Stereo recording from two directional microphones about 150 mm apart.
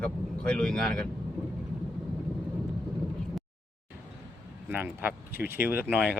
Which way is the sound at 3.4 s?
Centre (ahead or behind).